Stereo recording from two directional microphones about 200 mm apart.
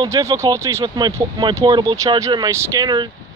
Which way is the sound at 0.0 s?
15° right (ahead or behind).